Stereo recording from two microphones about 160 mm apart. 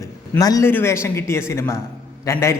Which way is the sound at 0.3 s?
20° left (ahead or behind).